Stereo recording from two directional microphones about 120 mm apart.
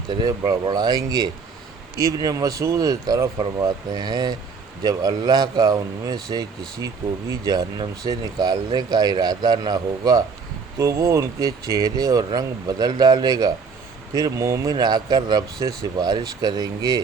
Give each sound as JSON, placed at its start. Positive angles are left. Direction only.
{"t": 0.1, "sound": "speech", "side_deg": -35}